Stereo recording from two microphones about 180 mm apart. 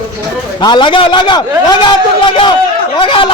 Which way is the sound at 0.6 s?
25° left (ahead or behind).